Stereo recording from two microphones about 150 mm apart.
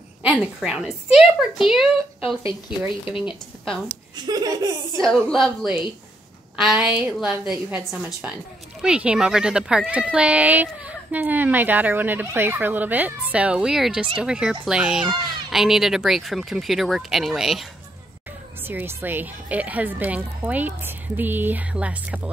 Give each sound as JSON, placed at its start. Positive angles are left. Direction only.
{"t": 0.2, "sound": "a woman's voice", "side_deg": -10}
{"t": 4.3, "sound": "laughter", "side_deg": -25}
{"t": 5.3, "sound": "speech", "side_deg": 0}
{"t": 18.7, "sound": "speech", "side_deg": -15}